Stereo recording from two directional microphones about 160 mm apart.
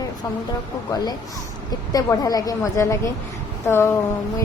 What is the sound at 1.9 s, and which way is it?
A woman's voice, 25° left (ahead or behind).